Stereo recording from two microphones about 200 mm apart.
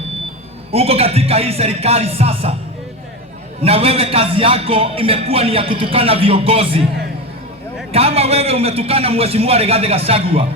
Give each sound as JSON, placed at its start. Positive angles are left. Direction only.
{"t": 0.7, "sound": "a man's voice", "side_deg": -30}
{"t": 3.6, "sound": "a man's voice", "side_deg": -30}
{"t": 7.9, "sound": "a man's voice", "side_deg": -30}